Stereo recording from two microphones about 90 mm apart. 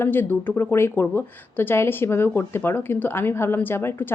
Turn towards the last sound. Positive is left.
turn(degrees=25)  # may be behind; listen again after turning